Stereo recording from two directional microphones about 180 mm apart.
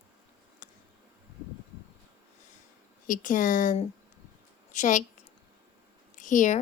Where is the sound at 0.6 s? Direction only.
45° left (ahead or behind).